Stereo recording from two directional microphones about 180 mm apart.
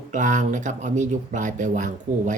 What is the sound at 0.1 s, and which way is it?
Speech, 45° right (ahead or behind).